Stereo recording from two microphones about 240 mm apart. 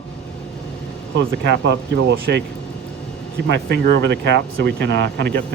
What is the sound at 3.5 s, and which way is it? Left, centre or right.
Speech, right.